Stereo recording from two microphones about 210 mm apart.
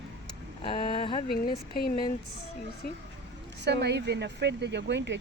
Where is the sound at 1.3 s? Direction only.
45° left (ahead or behind).